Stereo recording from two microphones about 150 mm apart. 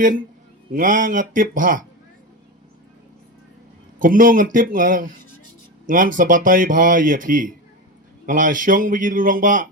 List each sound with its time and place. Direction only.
0.7 s speech: 65° right (ahead or behind)
4.0 s speech: 65° right (ahead or behind)